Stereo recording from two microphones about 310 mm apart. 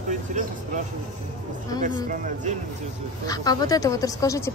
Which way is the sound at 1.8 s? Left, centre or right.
Right.